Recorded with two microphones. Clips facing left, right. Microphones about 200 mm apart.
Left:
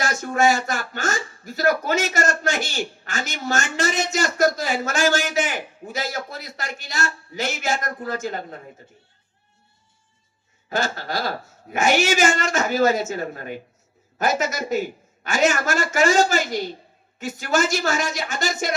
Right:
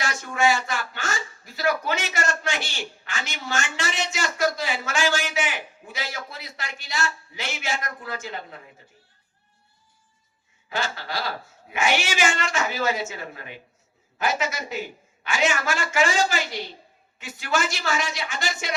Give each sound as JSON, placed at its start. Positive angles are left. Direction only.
{"t": 0.0, "sound": "speech", "side_deg": 45}
{"t": 10.7, "sound": "speech", "side_deg": 45}